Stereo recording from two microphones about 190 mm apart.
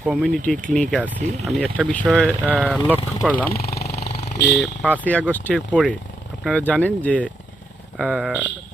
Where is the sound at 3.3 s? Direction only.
50° left (ahead or behind).